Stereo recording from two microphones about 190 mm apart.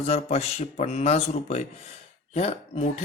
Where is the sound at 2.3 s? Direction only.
35° left (ahead or behind).